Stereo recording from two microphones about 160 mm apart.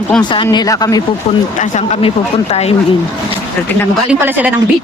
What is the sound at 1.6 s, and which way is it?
Speech, 45° left (ahead or behind).